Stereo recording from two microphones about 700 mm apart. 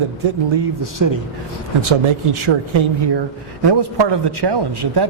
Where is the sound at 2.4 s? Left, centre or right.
Right.